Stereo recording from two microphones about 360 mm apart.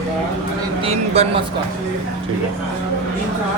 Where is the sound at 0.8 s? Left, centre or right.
Centre.